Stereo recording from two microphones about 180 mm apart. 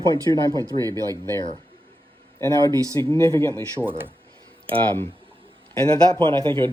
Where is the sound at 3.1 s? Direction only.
15° left (ahead or behind).